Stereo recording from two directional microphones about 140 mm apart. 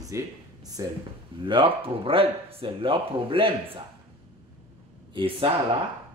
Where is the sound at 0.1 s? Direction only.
20° right (ahead or behind).